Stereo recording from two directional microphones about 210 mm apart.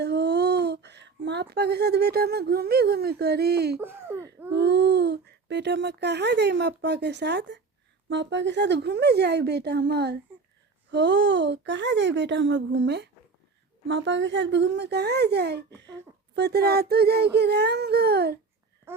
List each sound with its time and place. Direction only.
0.0 s speech: 55° right (ahead or behind)
3.8 s speech: 10° right (ahead or behind)
4.5 s speech: 55° right (ahead or behind)
18.9 s a sound: 10° right (ahead or behind)